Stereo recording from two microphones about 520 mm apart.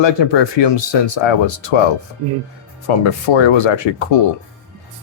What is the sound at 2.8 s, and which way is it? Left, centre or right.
Speech, left.